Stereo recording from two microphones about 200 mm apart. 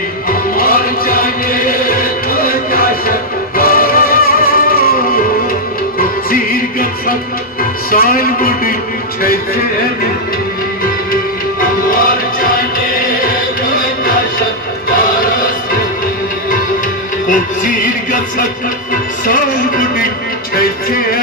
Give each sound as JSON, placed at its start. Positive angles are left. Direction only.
{"t": 0.3, "sound": "music", "side_deg": 45}
{"t": 7.9, "sound": "speech", "side_deg": 45}
{"t": 11.9, "sound": "music", "side_deg": 45}
{"t": 17.2, "sound": "music", "side_deg": 40}
{"t": 19.3, "sound": "a sound", "side_deg": 45}